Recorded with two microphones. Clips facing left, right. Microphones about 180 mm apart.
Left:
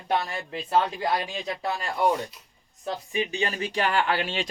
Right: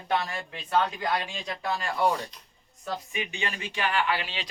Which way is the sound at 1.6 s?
20° left (ahead or behind).